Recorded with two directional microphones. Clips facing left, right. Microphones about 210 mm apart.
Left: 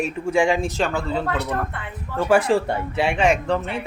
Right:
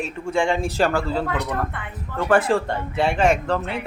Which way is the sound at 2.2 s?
10° left (ahead or behind).